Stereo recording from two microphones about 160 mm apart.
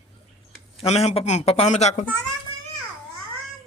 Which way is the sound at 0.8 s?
40° left (ahead or behind).